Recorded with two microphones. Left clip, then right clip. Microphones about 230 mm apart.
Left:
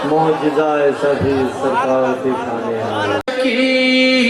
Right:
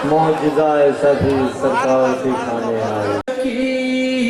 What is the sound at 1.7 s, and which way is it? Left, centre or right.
Music, centre.